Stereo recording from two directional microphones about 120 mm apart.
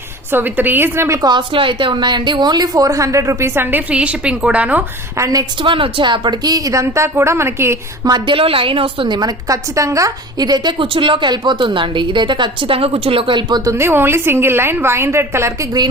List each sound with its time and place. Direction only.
0.3 s a woman's voice: 15° right (ahead or behind)
1.3 s a woman's voice: 40° right (ahead or behind); by 4.8 s 10° right (ahead or behind)
5.1 s a woman's voice: 30° right (ahead or behind)
5.6 s a woman's voice: 45° right (ahead or behind); by 7.8 s 20° right (ahead or behind)
8.0 s a woman's voice: 35° right (ahead or behind)
8.4 s a woman's voice: 50° right (ahead or behind)
13.7 s a woman's voice: 20° right (ahead or behind)